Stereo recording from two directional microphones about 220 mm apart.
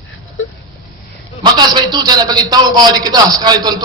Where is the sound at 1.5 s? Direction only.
20° right (ahead or behind).